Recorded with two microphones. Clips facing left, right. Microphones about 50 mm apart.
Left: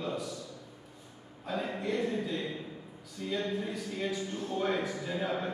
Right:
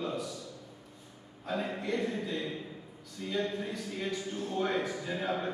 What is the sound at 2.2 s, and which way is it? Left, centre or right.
Speech, centre.